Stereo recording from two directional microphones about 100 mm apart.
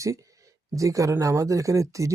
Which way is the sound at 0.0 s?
35° right (ahead or behind).